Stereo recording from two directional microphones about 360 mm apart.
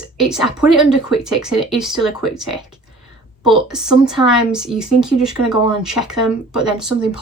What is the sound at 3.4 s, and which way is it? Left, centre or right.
Speech, centre.